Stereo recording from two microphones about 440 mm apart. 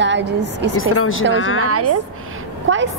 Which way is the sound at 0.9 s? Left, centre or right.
Left.